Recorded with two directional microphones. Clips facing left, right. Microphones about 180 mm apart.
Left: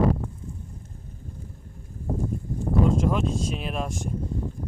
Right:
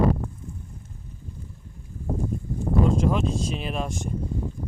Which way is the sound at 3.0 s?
Centre (ahead or behind).